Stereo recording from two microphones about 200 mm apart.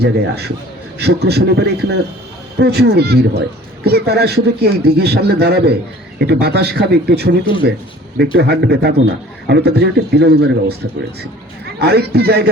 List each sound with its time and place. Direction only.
0.0 s a man's voice: 55° right (ahead or behind)
11.8 s a man's voice: 55° right (ahead or behind)